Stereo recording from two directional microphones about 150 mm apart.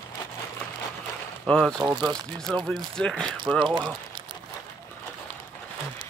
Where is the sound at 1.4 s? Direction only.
Centre (ahead or behind).